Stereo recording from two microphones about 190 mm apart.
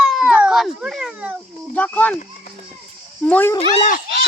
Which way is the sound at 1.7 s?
10° left (ahead or behind).